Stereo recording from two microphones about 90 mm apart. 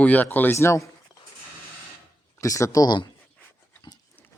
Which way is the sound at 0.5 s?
30° left (ahead or behind).